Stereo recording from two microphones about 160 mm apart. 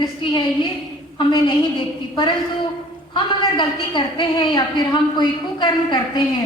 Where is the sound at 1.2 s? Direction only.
25° left (ahead or behind).